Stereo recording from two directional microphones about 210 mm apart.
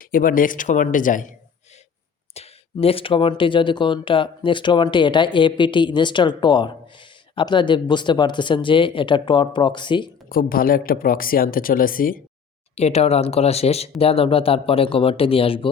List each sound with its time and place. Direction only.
0.0 s speech: 40° left (ahead or behind); by 10.1 s 20° left (ahead or behind)
10.2 s speech: 45° left (ahead or behind)
12.7 s speech: 30° left (ahead or behind)